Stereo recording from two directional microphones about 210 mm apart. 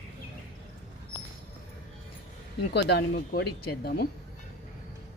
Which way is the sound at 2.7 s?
55° left (ahead or behind).